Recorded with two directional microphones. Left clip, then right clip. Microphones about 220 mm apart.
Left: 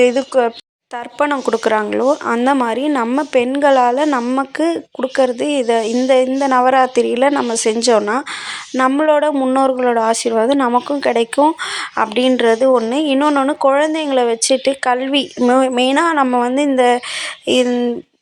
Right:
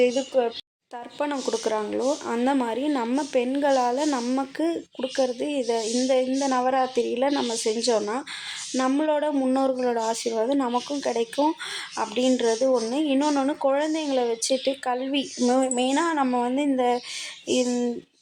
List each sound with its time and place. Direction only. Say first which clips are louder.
0.0 s speech: left 9 dB; 20° left (ahead or behind)